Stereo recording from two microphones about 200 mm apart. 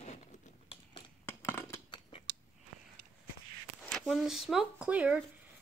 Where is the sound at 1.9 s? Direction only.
25° left (ahead or behind).